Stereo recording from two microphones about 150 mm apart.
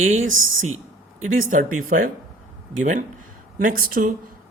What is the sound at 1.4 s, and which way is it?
Speech, 65° right (ahead or behind).